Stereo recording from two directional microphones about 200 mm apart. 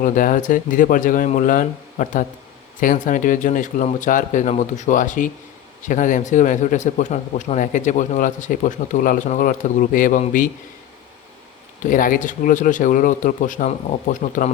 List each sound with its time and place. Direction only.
0.0 s a man's voice: 40° left (ahead or behind)
11.8 s a man's voice: 40° left (ahead or behind)